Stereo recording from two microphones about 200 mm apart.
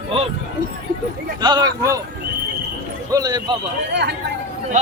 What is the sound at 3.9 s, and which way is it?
Speech, 60° right (ahead or behind).